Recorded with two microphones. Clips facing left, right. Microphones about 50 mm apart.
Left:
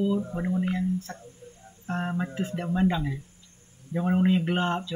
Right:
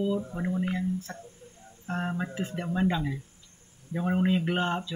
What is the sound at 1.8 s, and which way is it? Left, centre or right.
Speech, centre.